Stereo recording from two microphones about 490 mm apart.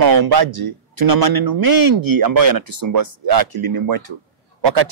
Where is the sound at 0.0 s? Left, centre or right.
Right.